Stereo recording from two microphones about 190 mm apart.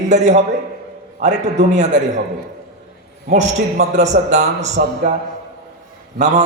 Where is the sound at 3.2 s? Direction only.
40° right (ahead or behind).